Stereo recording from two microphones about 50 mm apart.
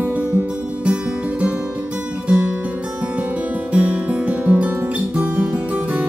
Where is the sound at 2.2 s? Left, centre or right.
Centre.